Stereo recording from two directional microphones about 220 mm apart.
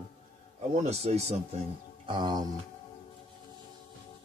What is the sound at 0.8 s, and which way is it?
Speech, 30° right (ahead or behind).